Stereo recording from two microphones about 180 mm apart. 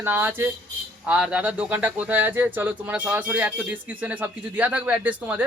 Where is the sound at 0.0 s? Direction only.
10° right (ahead or behind).